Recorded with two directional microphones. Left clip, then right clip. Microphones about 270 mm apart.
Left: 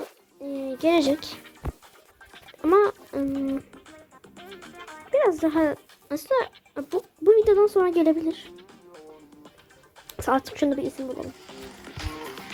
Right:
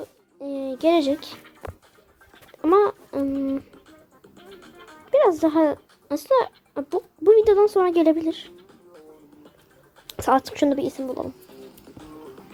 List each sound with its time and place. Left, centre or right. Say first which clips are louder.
0.6 s speech: right 2 dB; centre
2.6 s a sound: right 1 dB; centre
4.5 s music: left 4 dB; left
5.1 s speech: right 3 dB; centre
8.5 s music: left 1 dB; centre
10.1 s speech: right 4 dB; centre
11.4 s music: left 3 dB; centre